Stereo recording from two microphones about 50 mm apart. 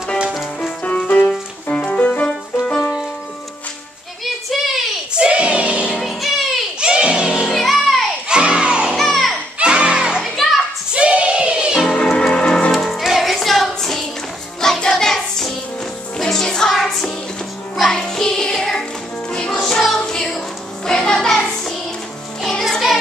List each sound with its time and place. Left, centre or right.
0.8 s music: left
4.2 s child singing: centre
5.1 s a sound: right
5.9 s music: centre
6.8 s music: centre
7.5 s music: centre
8.3 s music: centre
8.9 s music: centre
9.6 s music: right
10.3 s children playing: centre
10.9 s music: right
11.8 s music: centre
12.7 s music: centre